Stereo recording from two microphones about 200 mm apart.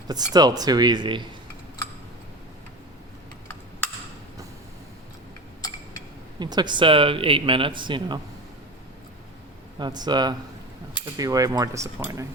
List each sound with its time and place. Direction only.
0.1 s a man's voice: 20° right (ahead or behind)
6.4 s a man's voice: 20° right (ahead or behind)
9.7 s a man's voice: 20° right (ahead or behind)